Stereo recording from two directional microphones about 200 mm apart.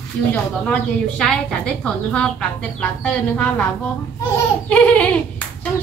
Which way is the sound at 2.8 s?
5° left (ahead or behind).